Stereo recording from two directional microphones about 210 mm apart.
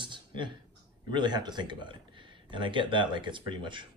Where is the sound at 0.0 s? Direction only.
25° right (ahead or behind).